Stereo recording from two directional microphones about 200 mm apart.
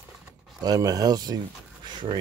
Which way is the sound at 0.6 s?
20° right (ahead or behind).